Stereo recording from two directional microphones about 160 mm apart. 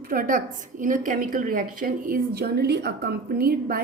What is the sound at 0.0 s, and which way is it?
A woman's voice, 65° right (ahead or behind).